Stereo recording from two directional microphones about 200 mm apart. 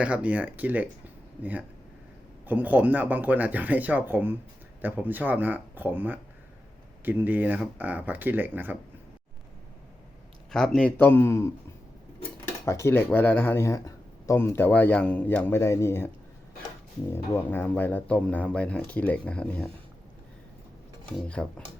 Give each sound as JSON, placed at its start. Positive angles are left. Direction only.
{"t": 0.0, "sound": "speech", "side_deg": -5}
{"t": 10.5, "sound": "speech", "side_deg": 5}
{"t": 12.6, "sound": "speech", "side_deg": 15}
{"t": 21.4, "sound": "speech", "side_deg": 5}